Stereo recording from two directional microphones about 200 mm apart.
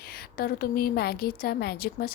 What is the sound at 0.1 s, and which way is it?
A woman's voice, 50° left (ahead or behind).